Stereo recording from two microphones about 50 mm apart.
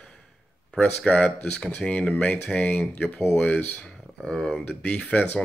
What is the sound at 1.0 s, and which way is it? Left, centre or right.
Speech, left.